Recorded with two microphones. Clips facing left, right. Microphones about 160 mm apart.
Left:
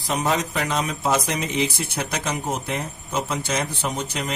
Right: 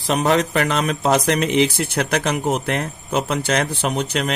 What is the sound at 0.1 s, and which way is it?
Speech, 70° right (ahead or behind).